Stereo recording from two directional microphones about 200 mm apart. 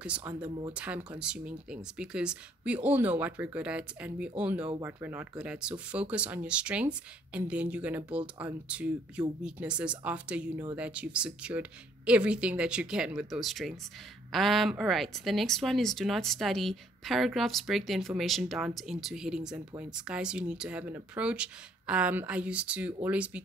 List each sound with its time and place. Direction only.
0.0 s speech: 5° right (ahead or behind)
0.5 s speech: 25° right (ahead or behind)
0.7 s speech: 5° right (ahead or behind)
10.9 s speech: 5° right (ahead or behind)